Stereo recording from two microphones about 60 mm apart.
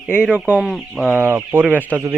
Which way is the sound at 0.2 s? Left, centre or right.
Centre.